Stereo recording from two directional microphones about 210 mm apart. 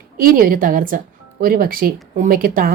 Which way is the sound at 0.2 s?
45° right (ahead or behind).